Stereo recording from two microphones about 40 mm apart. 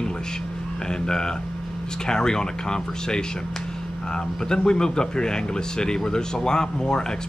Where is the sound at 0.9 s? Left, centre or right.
Centre.